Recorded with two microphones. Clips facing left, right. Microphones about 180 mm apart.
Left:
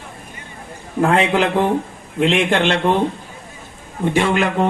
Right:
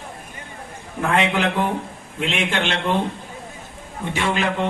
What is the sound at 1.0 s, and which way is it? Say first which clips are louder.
A man's voice: left 4 dB; 35° left (ahead or behind).